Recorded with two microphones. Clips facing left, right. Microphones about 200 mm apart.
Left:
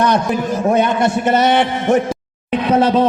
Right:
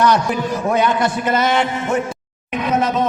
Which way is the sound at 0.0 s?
20° left (ahead or behind).